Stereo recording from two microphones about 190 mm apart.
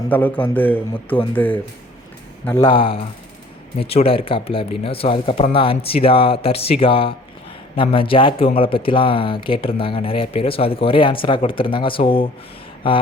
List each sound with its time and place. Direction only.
0.1 s a man's voice: 10° left (ahead or behind)
2.6 s speech: 25° left (ahead or behind)